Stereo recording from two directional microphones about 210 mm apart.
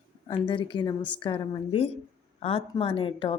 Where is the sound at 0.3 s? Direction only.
25° left (ahead or behind).